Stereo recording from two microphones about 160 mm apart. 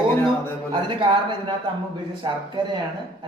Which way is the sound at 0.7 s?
30° right (ahead or behind).